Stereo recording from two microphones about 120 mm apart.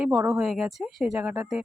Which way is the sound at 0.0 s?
5° right (ahead or behind).